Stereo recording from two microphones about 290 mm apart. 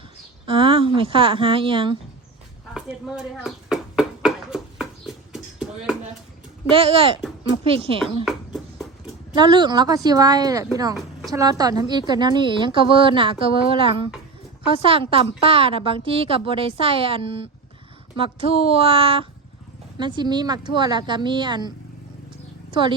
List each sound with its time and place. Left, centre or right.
0.4 s a woman's voice: centre
3.4 s a sound: centre
6.7 s a woman's voice: centre
8.2 s a sound: centre
9.3 s a woman's voice: centre
22.7 s a woman's voice: centre